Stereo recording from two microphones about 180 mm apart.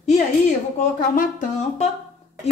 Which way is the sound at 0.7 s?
45° left (ahead or behind).